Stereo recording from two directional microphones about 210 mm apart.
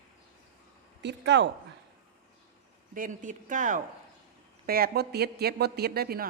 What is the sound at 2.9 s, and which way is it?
Speech, 40° right (ahead or behind).